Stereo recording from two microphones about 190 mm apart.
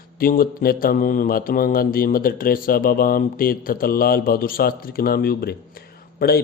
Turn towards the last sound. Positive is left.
turn(degrees=55)  # may be behind; listen again after turning